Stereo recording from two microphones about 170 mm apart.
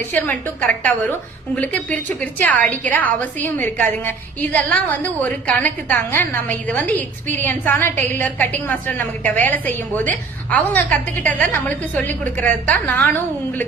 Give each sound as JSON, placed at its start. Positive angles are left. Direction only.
{"t": 0.1, "sound": "a woman's voice", "side_deg": 10}